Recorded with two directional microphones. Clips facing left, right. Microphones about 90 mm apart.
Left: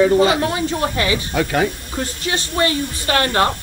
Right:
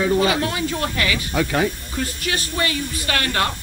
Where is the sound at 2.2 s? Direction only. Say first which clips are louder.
Left 6 dB; 30° left (ahead or behind).